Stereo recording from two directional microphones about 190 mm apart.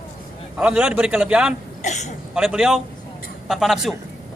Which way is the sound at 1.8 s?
40° left (ahead or behind).